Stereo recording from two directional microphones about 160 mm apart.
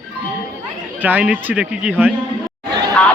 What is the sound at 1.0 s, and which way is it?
A man's voice, 10° right (ahead or behind).